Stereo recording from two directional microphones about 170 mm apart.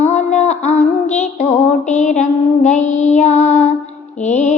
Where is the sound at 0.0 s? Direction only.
45° left (ahead or behind).